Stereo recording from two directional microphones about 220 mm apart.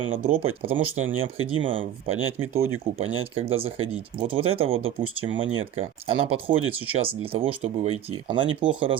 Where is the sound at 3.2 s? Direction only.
25° right (ahead or behind).